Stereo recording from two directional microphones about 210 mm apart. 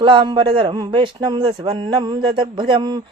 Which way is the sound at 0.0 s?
25° right (ahead or behind).